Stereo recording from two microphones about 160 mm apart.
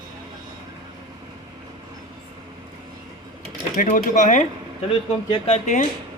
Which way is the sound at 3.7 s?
60° left (ahead or behind).